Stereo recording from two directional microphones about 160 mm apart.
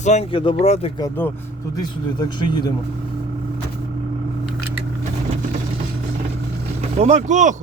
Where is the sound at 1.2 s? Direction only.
10° left (ahead or behind).